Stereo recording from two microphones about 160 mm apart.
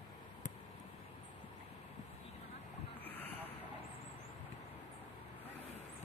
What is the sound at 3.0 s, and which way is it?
Vehicle, 10° left (ahead or behind).